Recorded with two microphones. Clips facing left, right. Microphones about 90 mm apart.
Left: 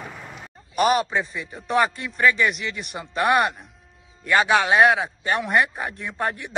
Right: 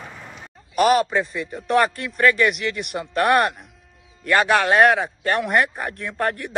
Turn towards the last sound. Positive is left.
turn(degrees=10)  # may be behind; listen again after turning